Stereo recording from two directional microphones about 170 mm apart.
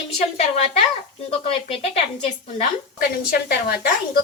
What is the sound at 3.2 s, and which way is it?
Speech, 60° left (ahead or behind).